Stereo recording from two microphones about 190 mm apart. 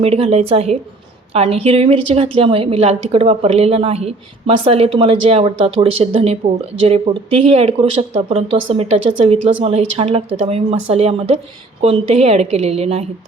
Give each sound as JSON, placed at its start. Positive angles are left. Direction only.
{"t": 0.0, "sound": "a woman's voice", "side_deg": -30}